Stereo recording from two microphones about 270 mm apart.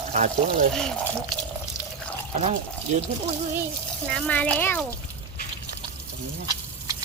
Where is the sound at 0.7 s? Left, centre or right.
Centre.